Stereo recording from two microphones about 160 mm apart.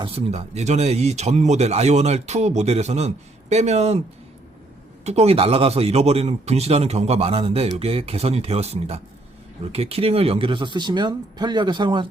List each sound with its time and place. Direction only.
0.0 s speech: 40° right (ahead or behind)
5.0 s a man's voice: 40° right (ahead or behind)